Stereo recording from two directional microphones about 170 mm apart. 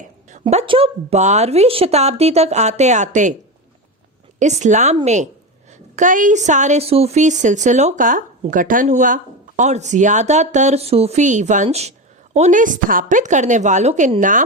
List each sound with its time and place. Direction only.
0.4 s speech: 30° right (ahead or behind); by 3.3 s 45° right (ahead or behind)
4.4 s a woman's voice: 45° right (ahead or behind)